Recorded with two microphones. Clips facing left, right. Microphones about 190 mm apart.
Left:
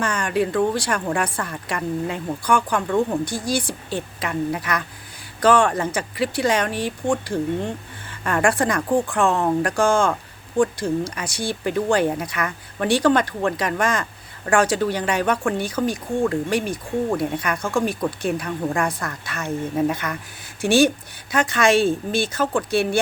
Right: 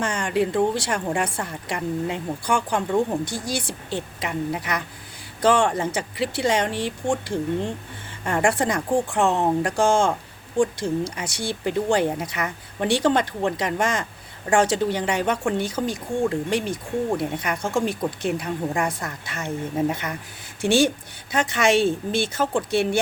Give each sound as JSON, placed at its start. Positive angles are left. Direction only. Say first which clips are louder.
{"t": 0.0, "sound": "a woman's voice", "louder": "left 1 dB", "side_deg": -25}